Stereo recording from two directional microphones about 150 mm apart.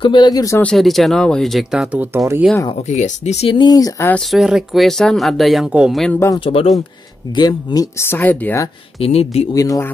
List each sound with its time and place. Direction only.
0.0 s speech: 30° left (ahead or behind)
0.6 s speech: 5° left (ahead or behind)
2.1 s speech: 20° right (ahead or behind)
2.9 s speech: 50° left (ahead or behind)
3.5 s speech: 25° left (ahead or behind)
4.1 s speech: centre (ahead or behind)
6.1 s speech: 20° left (ahead or behind)
6.4 s speech: 40° left (ahead or behind)
7.3 s speech: 25° left (ahead or behind)
9.0 s speech: 45° left (ahead or behind)
9.5 s speech: 25° left (ahead or behind)